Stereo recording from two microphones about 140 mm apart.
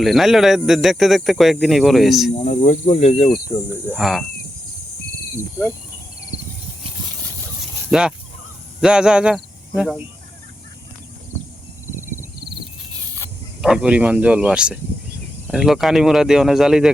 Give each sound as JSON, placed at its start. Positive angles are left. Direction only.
{"t": 0.0, "sound": "speech", "side_deg": 0}
{"t": 2.3, "sound": "speech", "side_deg": 45}
{"t": 3.9, "sound": "speech", "side_deg": 0}
{"t": 7.9, "sound": "speech", "side_deg": -5}
{"t": 13.6, "sound": "speech", "side_deg": -5}